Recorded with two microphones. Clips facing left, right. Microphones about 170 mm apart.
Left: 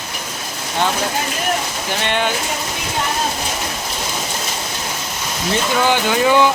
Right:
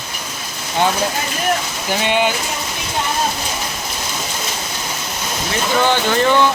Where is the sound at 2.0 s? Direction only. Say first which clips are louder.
Right 3 dB; 10° right (ahead or behind).